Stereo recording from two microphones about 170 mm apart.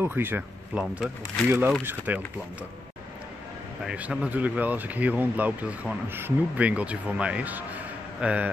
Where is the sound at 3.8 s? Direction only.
5° right (ahead or behind).